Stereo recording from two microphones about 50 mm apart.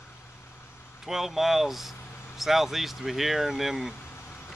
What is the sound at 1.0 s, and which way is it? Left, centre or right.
Speech, centre.